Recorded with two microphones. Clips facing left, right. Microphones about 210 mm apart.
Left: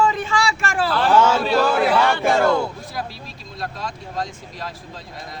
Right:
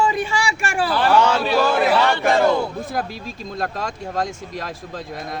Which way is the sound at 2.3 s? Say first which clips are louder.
Right 1 dB; 15° right (ahead or behind).